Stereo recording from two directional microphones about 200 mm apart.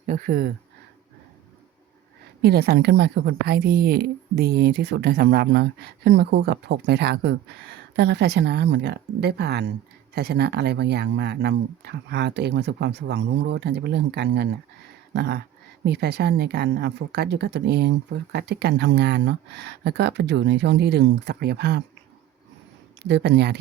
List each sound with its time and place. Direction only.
0.0 s speech: 45° right (ahead or behind)
2.4 s a woman's voice: 55° right (ahead or behind)
23.0 s a woman's voice: 55° right (ahead or behind)